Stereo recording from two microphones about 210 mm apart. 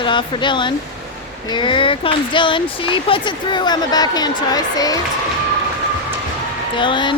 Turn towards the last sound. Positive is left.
turn(degrees=20)  # may be behind; listen again after turning